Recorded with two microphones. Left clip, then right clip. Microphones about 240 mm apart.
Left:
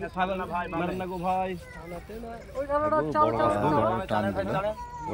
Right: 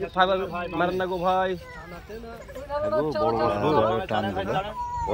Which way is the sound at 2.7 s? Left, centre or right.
Centre.